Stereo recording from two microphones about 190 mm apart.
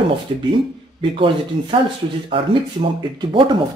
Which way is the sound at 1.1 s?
25° right (ahead or behind).